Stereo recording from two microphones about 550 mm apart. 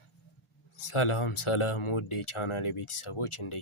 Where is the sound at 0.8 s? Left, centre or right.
Left.